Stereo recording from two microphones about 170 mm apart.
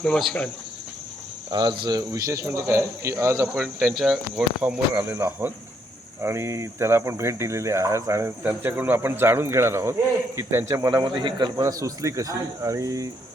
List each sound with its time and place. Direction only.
0.0 s speech: centre (ahead or behind)
1.5 s a man's voice: 25° right (ahead or behind)
3.5 s speech: centre (ahead or behind)
4.9 s a man's voice: 10° right (ahead or behind)